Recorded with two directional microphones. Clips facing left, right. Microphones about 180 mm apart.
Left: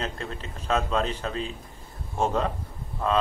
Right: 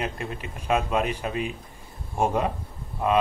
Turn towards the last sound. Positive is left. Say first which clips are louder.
# right 2 dB
turn(degrees=-15)  # may be behind; listen again after turning